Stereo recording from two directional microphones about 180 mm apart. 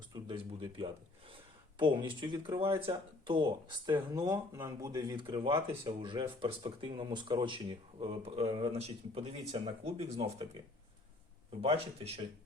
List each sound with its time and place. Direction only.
0.1 s speech: 30° right (ahead or behind)
11.6 s speech: 30° right (ahead or behind)